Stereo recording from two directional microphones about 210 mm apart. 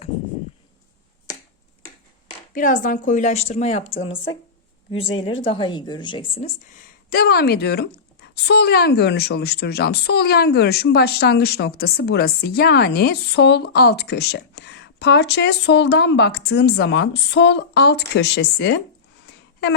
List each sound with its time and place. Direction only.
2.6 s a woman's voice: 40° left (ahead or behind)
5.4 s speech: 20° left (ahead or behind)
7.1 s a woman's voice: 45° left (ahead or behind)
19.2 s a sound: 55° left (ahead or behind)